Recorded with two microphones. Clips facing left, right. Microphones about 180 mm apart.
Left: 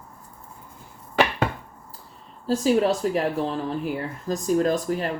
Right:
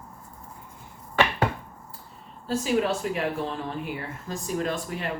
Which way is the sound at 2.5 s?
40° left (ahead or behind).